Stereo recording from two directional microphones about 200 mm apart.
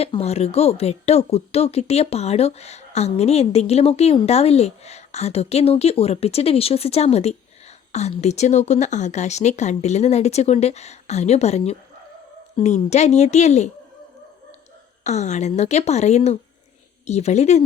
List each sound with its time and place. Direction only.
0.0 s speech: 30° left (ahead or behind)
15.0 s speech: 35° left (ahead or behind)